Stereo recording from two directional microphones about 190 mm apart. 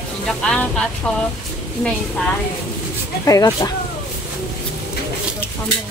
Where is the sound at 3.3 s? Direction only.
20° left (ahead or behind).